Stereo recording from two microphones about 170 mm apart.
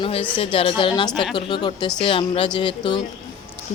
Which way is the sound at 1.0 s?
Centre (ahead or behind).